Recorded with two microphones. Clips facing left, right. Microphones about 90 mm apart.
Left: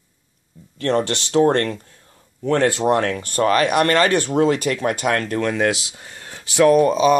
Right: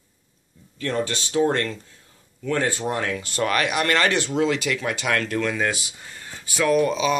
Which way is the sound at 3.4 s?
35° left (ahead or behind).